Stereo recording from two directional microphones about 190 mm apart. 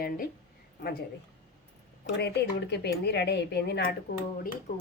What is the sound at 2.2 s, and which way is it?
Speech, 60° left (ahead or behind).